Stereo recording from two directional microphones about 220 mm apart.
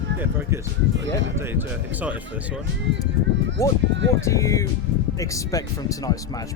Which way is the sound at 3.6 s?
15° left (ahead or behind).